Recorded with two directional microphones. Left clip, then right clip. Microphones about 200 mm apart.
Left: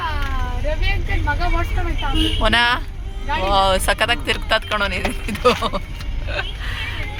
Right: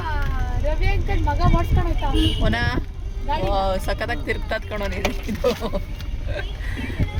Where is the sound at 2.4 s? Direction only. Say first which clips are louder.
Left 8 dB; 5° left (ahead or behind).